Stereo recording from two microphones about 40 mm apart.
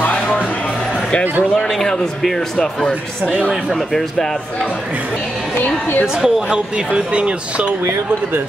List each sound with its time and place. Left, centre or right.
1.5 s speech: centre
5.6 s a woman's voice: left
6.2 s speech: centre
6.9 s speech: right